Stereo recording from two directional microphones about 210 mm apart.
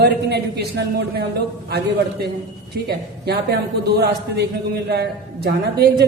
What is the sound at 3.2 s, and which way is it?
A man's voice, 50° right (ahead or behind).